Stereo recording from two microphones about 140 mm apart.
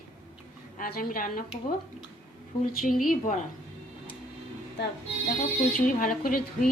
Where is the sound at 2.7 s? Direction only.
90° left.